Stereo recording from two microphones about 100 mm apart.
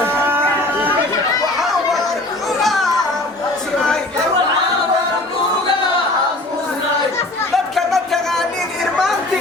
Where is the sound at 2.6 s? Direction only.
Centre (ahead or behind).